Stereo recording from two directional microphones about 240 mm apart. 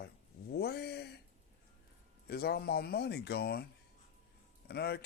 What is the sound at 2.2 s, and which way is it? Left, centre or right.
Speech, left.